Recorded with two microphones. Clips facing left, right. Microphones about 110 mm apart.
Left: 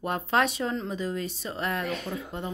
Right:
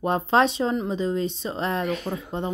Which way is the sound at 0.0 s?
25° right (ahead or behind).